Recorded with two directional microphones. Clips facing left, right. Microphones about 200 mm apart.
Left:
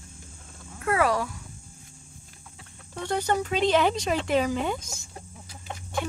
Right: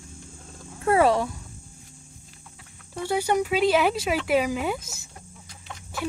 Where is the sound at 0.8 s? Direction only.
25° right (ahead or behind).